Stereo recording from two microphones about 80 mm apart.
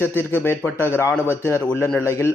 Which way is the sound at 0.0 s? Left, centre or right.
Left.